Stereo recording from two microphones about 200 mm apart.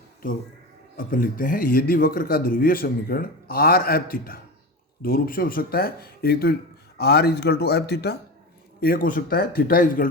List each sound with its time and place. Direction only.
0.9 s a man's voice: 45° left (ahead or behind)